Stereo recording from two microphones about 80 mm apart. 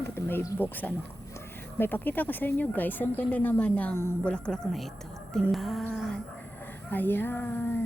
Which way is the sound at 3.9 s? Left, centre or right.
Left.